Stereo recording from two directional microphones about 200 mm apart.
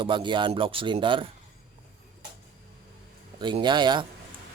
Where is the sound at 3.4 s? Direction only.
20° right (ahead or behind).